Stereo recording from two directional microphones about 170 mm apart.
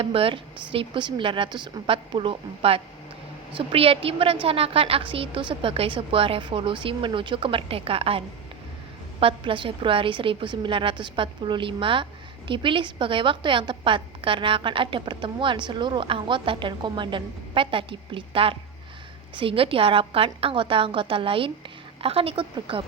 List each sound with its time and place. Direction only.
0.0 s a woman's voice: 35° right (ahead or behind)
9.2 s a woman's voice: 30° right (ahead or behind)